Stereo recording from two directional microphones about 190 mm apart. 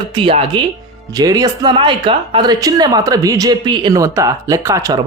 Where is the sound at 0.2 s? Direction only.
30° right (ahead or behind).